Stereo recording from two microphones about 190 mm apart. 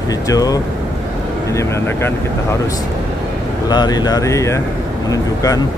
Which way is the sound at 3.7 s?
20° left (ahead or behind).